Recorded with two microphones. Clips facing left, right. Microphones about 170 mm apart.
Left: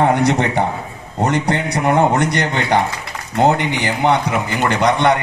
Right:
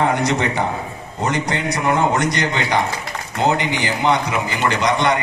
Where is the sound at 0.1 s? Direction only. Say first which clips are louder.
Left 4 dB; 60° left (ahead or behind).